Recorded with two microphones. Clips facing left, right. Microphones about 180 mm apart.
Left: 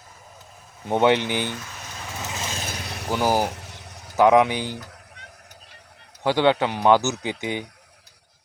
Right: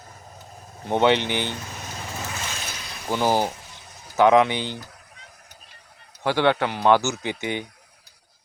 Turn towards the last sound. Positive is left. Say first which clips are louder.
# even
turn(degrees=15)  # may be behind; listen again after turning